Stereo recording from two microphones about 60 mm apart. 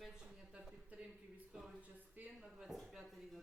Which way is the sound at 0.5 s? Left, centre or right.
Centre.